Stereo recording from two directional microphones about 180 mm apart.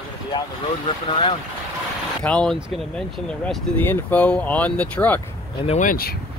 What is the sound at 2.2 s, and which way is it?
Speech, 5° left (ahead or behind).